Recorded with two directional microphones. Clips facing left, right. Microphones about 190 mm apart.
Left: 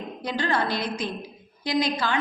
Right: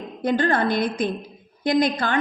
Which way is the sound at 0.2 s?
50° right (ahead or behind).